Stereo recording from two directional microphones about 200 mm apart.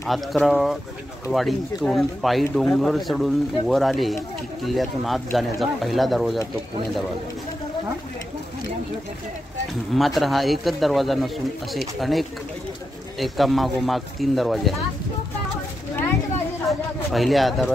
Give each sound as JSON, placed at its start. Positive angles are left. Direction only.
{"t": 0.0, "sound": "speech", "side_deg": 0}
{"t": 9.9, "sound": "speech", "side_deg": 0}
{"t": 16.6, "sound": "speech", "side_deg": 0}